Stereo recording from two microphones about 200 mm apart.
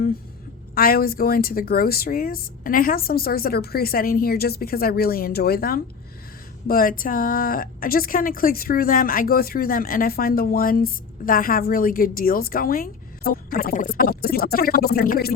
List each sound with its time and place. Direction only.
0.8 s speech: 45° left (ahead or behind)